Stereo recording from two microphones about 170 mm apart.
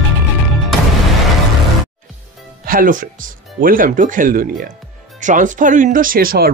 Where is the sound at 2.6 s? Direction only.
55° right (ahead or behind).